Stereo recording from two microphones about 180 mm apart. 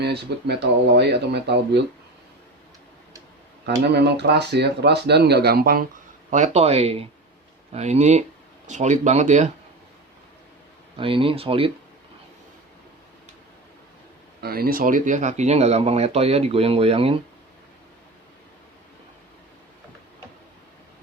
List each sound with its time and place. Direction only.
0.0 s speech: 65° right (ahead or behind)
3.9 s speech: 70° right (ahead or behind)
6.3 s speech: 40° right (ahead or behind)
10.9 s speech: 30° right (ahead or behind)
14.4 s speech: 55° right (ahead or behind); by 17.2 s 30° right (ahead or behind)